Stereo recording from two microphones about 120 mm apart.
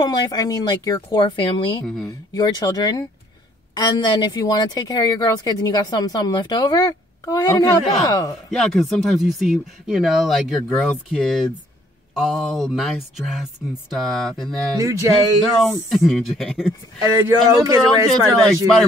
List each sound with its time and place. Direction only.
0.0 s speech: 35° left (ahead or behind)
8.5 s speech: centre (ahead or behind)
14.8 s speech: 25° right (ahead or behind)
15.6 s speech: centre (ahead or behind)